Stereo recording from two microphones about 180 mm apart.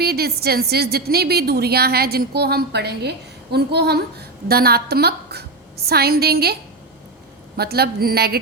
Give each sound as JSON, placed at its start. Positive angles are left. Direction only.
{"t": 0.0, "sound": "a woman's voice", "side_deg": -60}